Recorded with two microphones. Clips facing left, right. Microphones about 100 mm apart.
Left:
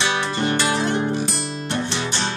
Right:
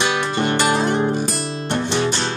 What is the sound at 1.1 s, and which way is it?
Music, 40° right (ahead or behind).